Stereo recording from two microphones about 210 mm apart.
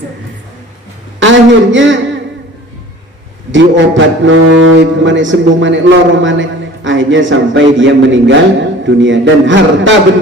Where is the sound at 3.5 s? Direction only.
60° right (ahead or behind).